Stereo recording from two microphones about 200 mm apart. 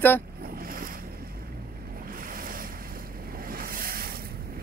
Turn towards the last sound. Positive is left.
turn(degrees=-50)  # may be behind; listen again after turning